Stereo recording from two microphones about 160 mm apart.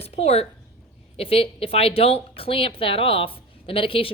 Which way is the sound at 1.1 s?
35° left (ahead or behind).